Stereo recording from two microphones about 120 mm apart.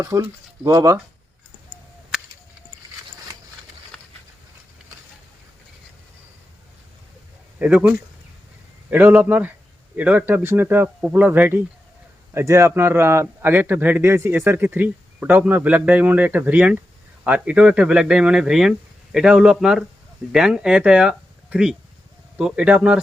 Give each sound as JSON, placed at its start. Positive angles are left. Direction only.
{"t": 0.0, "sound": "speech", "side_deg": -25}
{"t": 7.6, "sound": "a man's voice", "side_deg": -10}